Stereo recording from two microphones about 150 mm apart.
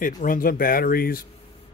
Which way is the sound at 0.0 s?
65° left (ahead or behind).